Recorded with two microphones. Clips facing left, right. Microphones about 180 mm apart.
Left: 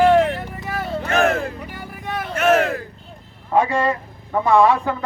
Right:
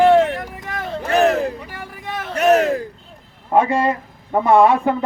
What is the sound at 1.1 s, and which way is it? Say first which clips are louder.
Speech: right 4 dB; 35° right (ahead or behind).